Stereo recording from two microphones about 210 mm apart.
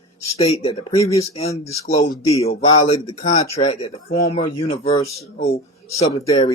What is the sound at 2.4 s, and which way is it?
Speech, 25° left (ahead or behind).